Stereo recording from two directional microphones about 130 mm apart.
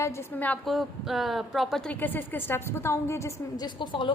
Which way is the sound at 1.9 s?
15° left (ahead or behind).